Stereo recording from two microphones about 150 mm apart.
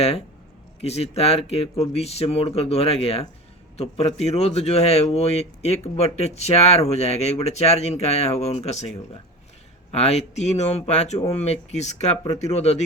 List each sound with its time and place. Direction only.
0.8 s a man's voice: 45° left (ahead or behind)
9.9 s a man's voice: 45° left (ahead or behind)